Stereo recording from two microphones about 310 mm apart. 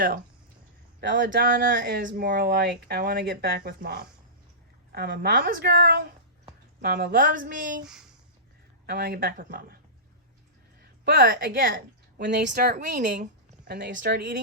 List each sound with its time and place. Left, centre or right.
1.2 s speech: right
8.9 s speech: right
11.0 s a woman's voice: right